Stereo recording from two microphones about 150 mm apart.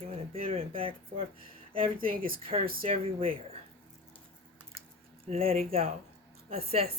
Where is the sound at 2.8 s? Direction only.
40° right (ahead or behind).